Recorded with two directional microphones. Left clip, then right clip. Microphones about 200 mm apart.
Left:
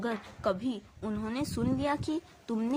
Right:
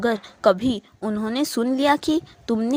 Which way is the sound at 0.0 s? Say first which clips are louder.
Right 13 dB; 40° right (ahead or behind).